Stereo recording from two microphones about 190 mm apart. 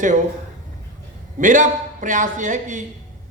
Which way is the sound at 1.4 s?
40° right (ahead or behind).